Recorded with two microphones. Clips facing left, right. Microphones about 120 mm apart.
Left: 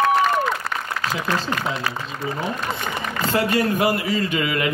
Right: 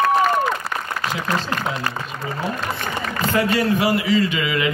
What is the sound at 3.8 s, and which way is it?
Speech, 45° left (ahead or behind).